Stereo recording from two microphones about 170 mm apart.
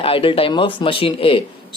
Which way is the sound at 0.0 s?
35° left (ahead or behind).